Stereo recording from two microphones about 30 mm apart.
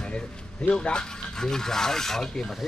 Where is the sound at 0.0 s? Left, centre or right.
Left; by 2.3 s centre.